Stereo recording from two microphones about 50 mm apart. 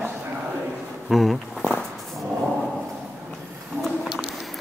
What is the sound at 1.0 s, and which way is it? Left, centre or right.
Speech, centre.